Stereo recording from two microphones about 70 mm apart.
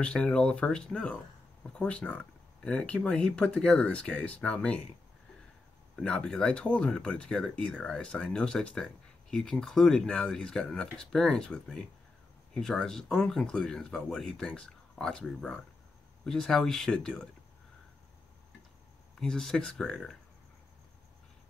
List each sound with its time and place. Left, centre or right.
0.0 s speech: centre
5.9 s speech: centre
19.1 s speech: centre